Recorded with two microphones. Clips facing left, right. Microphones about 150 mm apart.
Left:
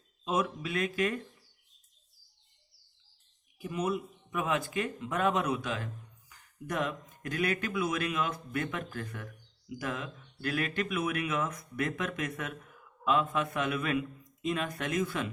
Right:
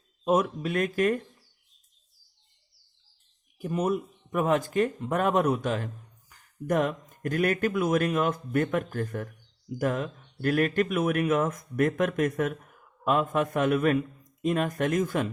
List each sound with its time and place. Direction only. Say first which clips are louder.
0.3 s speech: right 7 dB; 50° right (ahead or behind)
3.6 s speech: right 5 dB; 45° right (ahead or behind)